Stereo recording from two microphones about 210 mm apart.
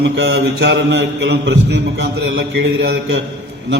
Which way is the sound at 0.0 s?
55° right (ahead or behind).